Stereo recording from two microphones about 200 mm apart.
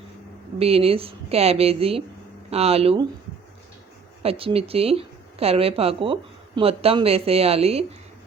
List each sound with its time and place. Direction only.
0.6 s a woman's voice: 30° right (ahead or behind)
4.2 s a woman's voice: 30° right (ahead or behind)